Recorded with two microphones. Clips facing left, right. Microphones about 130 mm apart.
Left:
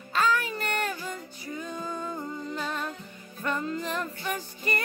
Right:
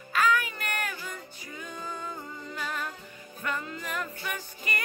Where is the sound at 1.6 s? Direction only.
30° left (ahead or behind).